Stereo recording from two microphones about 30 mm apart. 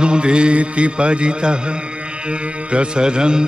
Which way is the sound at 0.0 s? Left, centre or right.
Right.